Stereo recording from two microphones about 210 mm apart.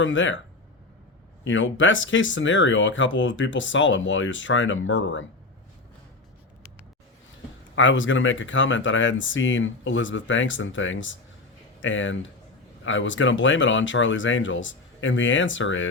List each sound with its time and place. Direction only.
0.0 s speech: 65° left (ahead or behind)
1.5 s speech: 65° left (ahead or behind)
7.8 s speech: 65° left (ahead or behind)